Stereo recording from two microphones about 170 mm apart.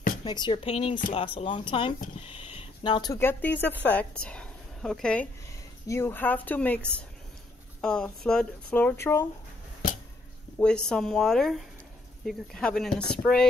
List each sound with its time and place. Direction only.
0.2 s a woman's voice: 30° left (ahead or behind); by 6.8 s 10° left (ahead or behind)
7.8 s speech: 5° left (ahead or behind)
10.6 s speech: 5° left (ahead or behind)